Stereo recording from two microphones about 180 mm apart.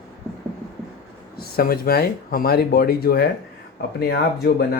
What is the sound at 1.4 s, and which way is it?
Speech, 55° left (ahead or behind).